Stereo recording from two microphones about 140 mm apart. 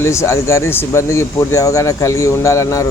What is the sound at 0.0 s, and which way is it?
Speech, 20° left (ahead or behind).